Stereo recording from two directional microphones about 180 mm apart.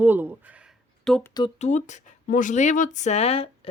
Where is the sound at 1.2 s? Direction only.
20° left (ahead or behind).